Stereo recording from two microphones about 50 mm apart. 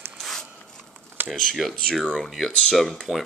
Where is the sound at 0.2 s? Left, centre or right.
Centre.